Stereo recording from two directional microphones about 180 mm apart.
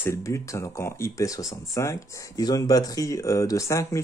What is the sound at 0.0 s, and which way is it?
Speech, 15° left (ahead or behind).